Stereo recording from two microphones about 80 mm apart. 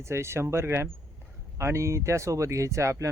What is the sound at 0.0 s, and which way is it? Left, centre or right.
Speech, right.